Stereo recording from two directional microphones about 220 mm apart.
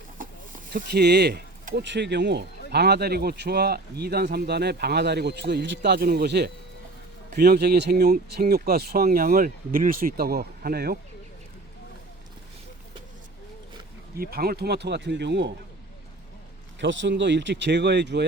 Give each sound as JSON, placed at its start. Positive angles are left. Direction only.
{"t": 0.7, "sound": "speech", "side_deg": -45}
{"t": 14.2, "sound": "speech", "side_deg": -45}
{"t": 16.8, "sound": "speech", "side_deg": -55}